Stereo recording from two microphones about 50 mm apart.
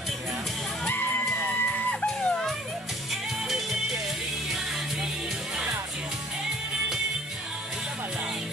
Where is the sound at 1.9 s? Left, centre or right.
Centre.